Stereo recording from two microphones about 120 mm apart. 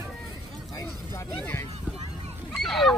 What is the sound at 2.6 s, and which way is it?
Goose, centre (ahead or behind).